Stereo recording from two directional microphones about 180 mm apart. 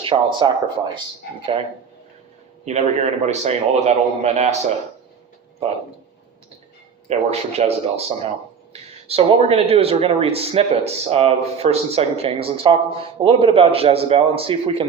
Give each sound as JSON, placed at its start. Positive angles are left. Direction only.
{"t": 0.0, "sound": "speech", "side_deg": -30}
{"t": 2.6, "sound": "speech", "side_deg": -40}
{"t": 7.1, "sound": "speech", "side_deg": -35}